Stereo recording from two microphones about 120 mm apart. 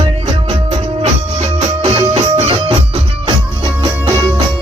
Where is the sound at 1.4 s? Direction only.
65° right (ahead or behind).